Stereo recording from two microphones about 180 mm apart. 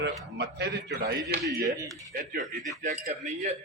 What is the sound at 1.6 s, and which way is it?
Speech, 20° right (ahead or behind).